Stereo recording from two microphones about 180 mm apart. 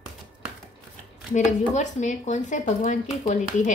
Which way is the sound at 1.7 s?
40° left (ahead or behind).